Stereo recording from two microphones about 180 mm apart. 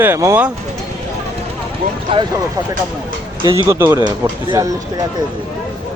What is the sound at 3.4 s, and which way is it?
Speech, 15° right (ahead or behind).